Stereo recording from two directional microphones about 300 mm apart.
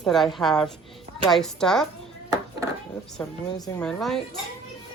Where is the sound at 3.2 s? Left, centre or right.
Centre.